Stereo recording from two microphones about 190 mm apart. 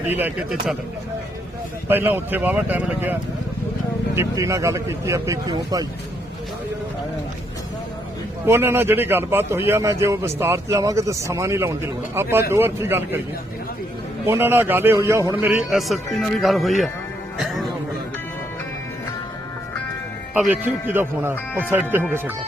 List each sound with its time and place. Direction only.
0.1 s a man's voice: 10° right (ahead or behind)
1.9 s a man's voice: 10° right (ahead or behind)
8.4 s a man's voice: 10° right (ahead or behind)
14.3 s a man's voice: 10° right (ahead or behind)
17.3 s music: centre (ahead or behind)
20.3 s a man's voice: 10° right (ahead or behind)